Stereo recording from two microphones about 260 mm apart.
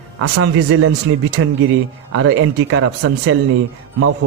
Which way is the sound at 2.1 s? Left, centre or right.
Right.